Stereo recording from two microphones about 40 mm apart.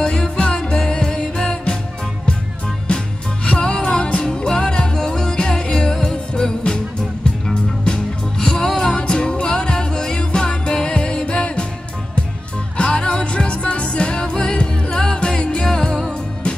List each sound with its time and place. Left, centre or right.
0.4 s music: left
2.9 s music: left
12.7 s music: left